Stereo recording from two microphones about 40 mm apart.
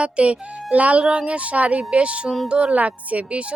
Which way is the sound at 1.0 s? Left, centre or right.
Centre.